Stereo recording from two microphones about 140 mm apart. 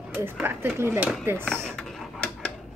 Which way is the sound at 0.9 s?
Centre (ahead or behind).